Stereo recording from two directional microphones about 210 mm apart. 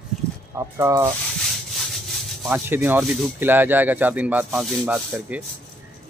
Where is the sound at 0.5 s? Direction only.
15° right (ahead or behind).